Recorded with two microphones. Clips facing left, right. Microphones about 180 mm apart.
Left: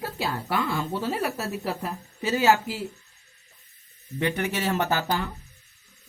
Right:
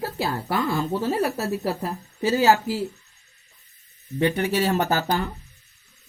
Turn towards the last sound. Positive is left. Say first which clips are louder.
# right 3 dB
turn(degrees=-40)  # may be behind; listen again after turning